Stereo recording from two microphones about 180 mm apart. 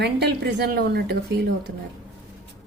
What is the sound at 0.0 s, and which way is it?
A woman's voice, 65° right (ahead or behind).